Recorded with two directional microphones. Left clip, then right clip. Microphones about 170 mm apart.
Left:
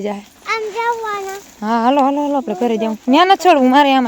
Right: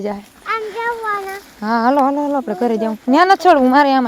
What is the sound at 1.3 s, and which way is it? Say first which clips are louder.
Speech: even; 5° left (ahead or behind).